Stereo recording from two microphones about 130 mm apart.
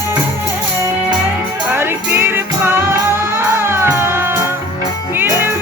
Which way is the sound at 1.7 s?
15° right (ahead or behind).